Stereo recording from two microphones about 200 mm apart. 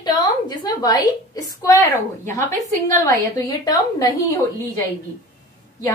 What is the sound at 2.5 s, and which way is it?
Speech, 40° right (ahead or behind).